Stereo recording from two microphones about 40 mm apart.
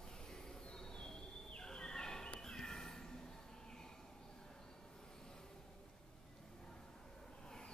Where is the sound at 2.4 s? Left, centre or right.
Centre.